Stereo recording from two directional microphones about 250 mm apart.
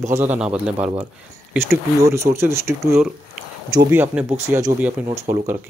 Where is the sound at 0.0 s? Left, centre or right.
Centre.